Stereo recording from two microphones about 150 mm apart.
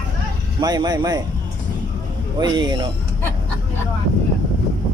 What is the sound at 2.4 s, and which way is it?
Speech, 30° right (ahead or behind).